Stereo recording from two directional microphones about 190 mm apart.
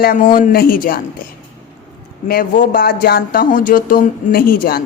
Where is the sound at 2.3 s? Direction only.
50° left (ahead or behind).